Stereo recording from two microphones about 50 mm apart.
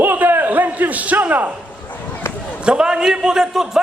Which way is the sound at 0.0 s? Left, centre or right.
Right.